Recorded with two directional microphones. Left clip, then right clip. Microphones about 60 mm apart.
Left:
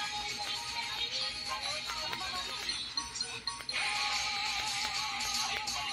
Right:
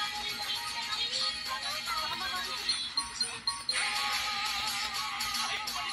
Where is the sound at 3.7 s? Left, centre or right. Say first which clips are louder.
Right 1 dB; right.